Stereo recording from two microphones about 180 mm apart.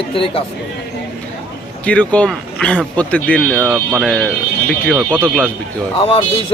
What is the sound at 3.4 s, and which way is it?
Speech, 5° right (ahead or behind).